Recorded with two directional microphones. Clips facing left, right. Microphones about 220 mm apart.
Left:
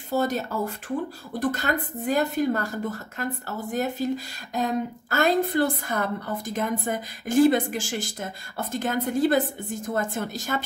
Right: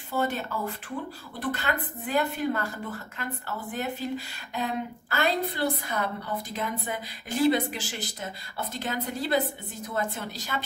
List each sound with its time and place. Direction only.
0.1 s a woman's voice: 40° left (ahead or behind)